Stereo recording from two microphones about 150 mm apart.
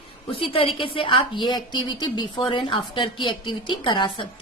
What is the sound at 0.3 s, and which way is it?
A woman's voice, 40° left (ahead or behind).